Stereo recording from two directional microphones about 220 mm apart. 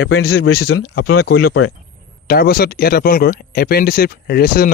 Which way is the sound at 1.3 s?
75° left (ahead or behind).